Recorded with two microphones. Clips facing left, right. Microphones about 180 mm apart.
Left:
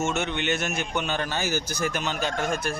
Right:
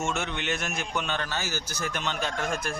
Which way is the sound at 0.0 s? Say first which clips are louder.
Left 4 dB; centre (ahead or behind).